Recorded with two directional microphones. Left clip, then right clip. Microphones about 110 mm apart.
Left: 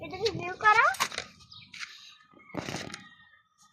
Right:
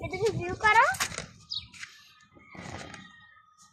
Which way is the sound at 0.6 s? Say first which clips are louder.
Even; 45° right (ahead or behind).